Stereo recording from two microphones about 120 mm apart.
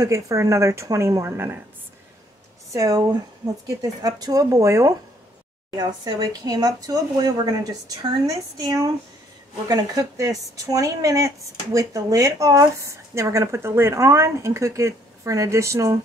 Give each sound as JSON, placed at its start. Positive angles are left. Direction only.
{"t": 0.0, "sound": "speech", "side_deg": -25}
{"t": 2.7, "sound": "speech", "side_deg": -25}